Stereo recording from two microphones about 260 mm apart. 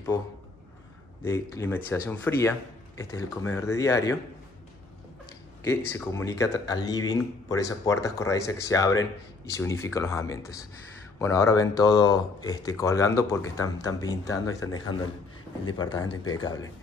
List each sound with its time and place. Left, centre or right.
1.2 s speech: centre
5.9 s speech: centre